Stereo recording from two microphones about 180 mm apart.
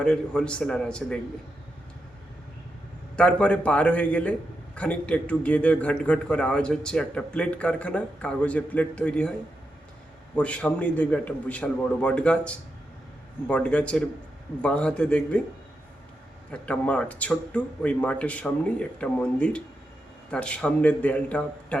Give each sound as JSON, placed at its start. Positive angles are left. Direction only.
{"t": 0.0, "sound": "a man's voice", "side_deg": 5}
{"t": 3.2, "sound": "a man's voice", "side_deg": 5}
{"t": 10.3, "sound": "a man's voice", "side_deg": 5}
{"t": 16.5, "sound": "a man's voice", "side_deg": 5}